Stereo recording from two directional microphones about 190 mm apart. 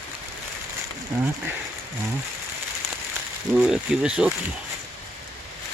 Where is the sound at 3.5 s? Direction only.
5° right (ahead or behind).